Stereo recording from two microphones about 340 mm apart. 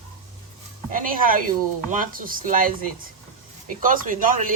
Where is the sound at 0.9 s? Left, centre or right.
Right.